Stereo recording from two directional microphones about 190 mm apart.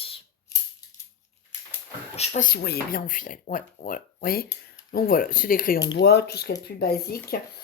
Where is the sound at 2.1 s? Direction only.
40° left (ahead or behind).